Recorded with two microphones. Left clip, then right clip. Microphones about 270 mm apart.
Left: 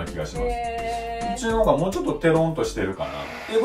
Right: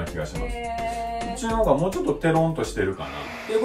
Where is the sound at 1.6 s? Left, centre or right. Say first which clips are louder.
Even; centre.